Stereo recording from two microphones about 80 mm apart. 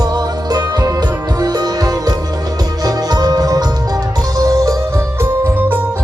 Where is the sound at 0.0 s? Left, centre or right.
Right.